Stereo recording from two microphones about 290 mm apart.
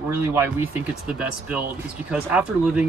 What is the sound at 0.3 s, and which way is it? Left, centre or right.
Speech, centre.